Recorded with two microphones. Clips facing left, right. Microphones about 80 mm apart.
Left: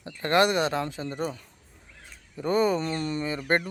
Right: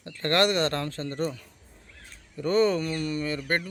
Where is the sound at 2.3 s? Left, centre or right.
Centre.